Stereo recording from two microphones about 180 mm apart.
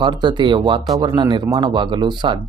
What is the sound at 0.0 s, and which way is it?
Speech, 25° right (ahead or behind).